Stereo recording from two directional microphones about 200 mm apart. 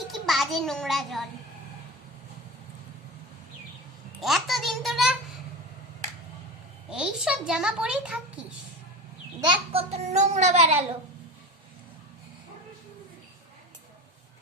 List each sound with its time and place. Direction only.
0.1 s a child's voice: centre (ahead or behind)
4.2 s a child's voice: centre (ahead or behind)
6.9 s a child's voice: 5° right (ahead or behind)
9.4 s a child's voice: 25° right (ahead or behind)